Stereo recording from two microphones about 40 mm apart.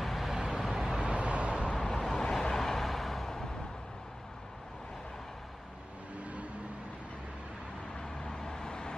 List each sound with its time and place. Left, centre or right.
0.0 s vehicle: centre
0.4 s vehicle: centre
1.0 s vehicle: right
1.8 s vehicle: centre
6.1 s vehicle: right
7.9 s vehicle: centre